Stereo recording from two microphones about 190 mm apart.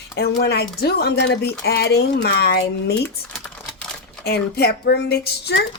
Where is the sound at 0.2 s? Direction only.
55° left (ahead or behind).